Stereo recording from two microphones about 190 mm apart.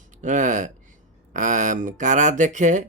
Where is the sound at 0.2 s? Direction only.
40° right (ahead or behind).